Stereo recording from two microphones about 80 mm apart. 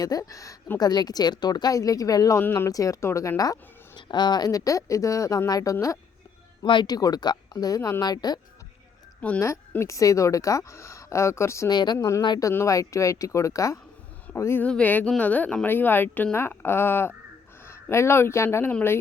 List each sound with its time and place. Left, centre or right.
0.0 s speech: left
0.8 s speech: left
2.4 s speech: left
2.6 s speech: left
6.6 s speech: left
9.4 s a woman's voice: left
11.7 s speech: left
11.9 s a woman's voice: left
14.6 s speech: centre